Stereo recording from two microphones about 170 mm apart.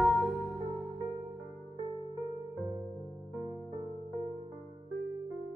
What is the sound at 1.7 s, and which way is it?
Music, 25° left (ahead or behind).